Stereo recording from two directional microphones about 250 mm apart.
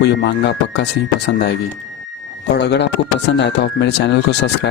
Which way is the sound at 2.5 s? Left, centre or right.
Left.